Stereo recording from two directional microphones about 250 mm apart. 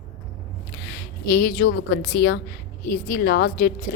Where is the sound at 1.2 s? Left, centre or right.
Left.